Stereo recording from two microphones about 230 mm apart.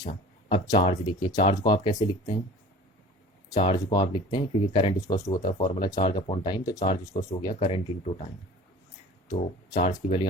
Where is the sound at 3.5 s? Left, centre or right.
Left.